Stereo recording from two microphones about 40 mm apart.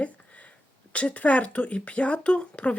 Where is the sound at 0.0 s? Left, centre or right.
Left.